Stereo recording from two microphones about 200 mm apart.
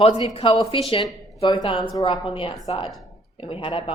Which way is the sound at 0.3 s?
30° left (ahead or behind).